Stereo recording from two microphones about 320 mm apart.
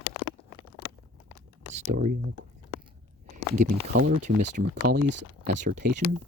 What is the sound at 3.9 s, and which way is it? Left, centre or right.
Speech, right.